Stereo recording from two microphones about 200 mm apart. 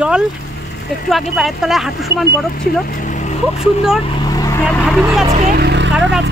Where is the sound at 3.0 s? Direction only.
40° left (ahead or behind).